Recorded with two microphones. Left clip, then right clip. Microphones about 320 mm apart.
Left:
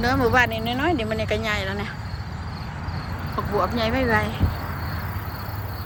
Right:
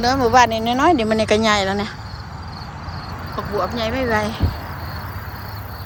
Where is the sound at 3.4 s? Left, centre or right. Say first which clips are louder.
Right 1 dB; centre.